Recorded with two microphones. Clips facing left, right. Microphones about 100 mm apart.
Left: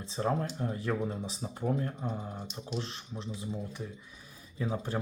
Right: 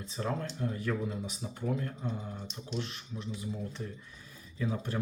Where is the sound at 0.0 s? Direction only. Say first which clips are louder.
Left 4 dB; 30° left (ahead or behind).